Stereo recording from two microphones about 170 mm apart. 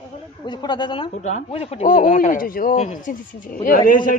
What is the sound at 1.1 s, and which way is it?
Speech, 45° left (ahead or behind).